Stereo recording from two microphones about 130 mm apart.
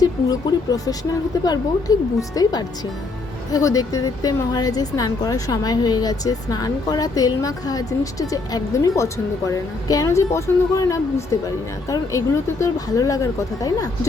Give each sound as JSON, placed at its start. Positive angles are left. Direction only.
{"t": 0.0, "sound": "a woman's voice", "side_deg": 30}